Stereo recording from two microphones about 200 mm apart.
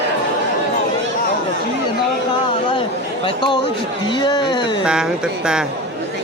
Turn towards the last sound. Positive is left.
turn(degrees=-5)  # may be behind; listen again after turning